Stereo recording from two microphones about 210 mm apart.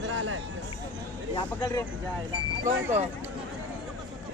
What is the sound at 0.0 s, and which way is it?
Music, 70° right (ahead or behind).